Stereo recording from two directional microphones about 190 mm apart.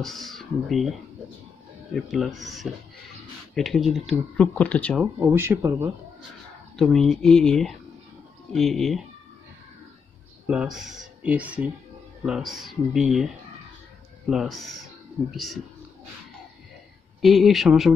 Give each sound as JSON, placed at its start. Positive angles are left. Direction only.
{"t": 0.0, "sound": "speech", "side_deg": 0}
{"t": 2.0, "sound": "speech", "side_deg": 0}
{"t": 5.0, "sound": "speech", "side_deg": -10}
{"t": 6.8, "sound": "speech", "side_deg": 0}
{"t": 10.4, "sound": "speech", "side_deg": -5}
{"t": 14.3, "sound": "speech", "side_deg": 0}
{"t": 17.2, "sound": "speech", "side_deg": 0}